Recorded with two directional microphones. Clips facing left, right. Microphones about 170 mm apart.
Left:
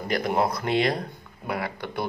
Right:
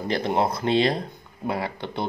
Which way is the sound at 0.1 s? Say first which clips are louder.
Even; 25° right (ahead or behind).